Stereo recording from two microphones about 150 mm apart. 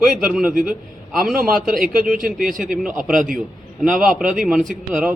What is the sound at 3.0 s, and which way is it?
Speech, 65° right (ahead or behind).